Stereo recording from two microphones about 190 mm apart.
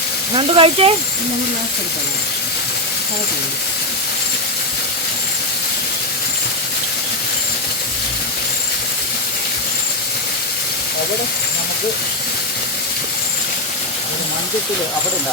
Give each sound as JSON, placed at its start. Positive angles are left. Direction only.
{"t": 0.3, "sound": "speech", "side_deg": -30}